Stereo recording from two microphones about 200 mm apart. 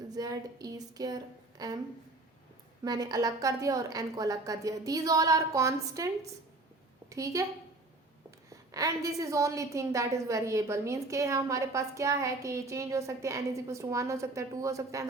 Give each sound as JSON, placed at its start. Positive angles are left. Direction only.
{"t": 0.1, "sound": "a woman's voice", "side_deg": -20}
{"t": 2.8, "sound": "a woman's voice", "side_deg": -20}
{"t": 7.1, "sound": "a woman's voice", "side_deg": -15}
{"t": 8.4, "sound": "a woman's voice", "side_deg": -15}